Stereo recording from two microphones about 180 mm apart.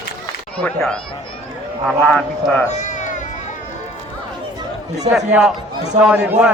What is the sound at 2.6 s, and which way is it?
Cat, 40° left (ahead or behind).